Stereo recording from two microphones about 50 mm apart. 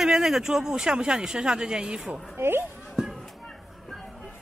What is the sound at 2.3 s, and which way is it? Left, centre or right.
Speech, right.